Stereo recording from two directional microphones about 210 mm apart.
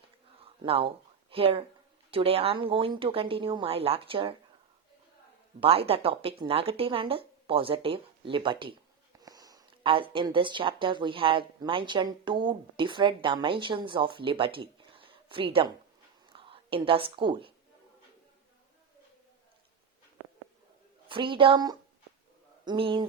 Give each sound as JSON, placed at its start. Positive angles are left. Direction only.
{"t": 0.4, "sound": "a sound", "side_deg": -25}
{"t": 2.0, "sound": "speech", "side_deg": -25}
{"t": 5.5, "sound": "speech", "side_deg": -25}
{"t": 21.1, "sound": "a man's voice", "side_deg": -25}